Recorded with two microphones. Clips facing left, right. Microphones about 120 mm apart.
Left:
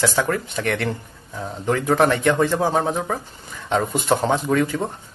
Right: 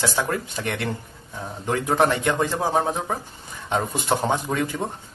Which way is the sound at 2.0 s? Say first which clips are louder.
Left 2 dB; 20° right (ahead or behind).